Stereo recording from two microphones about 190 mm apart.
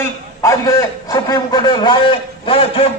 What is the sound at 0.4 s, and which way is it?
A man's voice, 15° left (ahead or behind).